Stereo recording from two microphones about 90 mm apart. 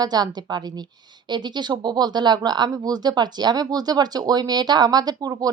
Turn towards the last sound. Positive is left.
turn(degrees=-45)  # may be behind; listen again after turning